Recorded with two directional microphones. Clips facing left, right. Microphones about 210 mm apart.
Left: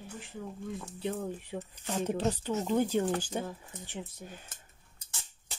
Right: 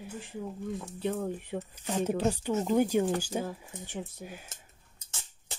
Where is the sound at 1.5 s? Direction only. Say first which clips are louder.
Right 3 dB; 55° right (ahead or behind).